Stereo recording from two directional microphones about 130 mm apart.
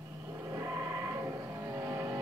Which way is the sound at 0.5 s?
20° right (ahead or behind).